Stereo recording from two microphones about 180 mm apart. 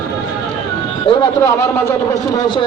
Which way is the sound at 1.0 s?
25° left (ahead or behind).